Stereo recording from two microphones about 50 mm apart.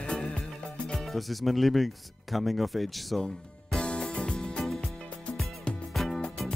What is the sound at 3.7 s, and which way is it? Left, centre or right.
Music, centre.